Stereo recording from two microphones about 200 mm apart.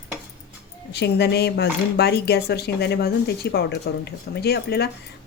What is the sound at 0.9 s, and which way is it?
Speech, 55° left (ahead or behind).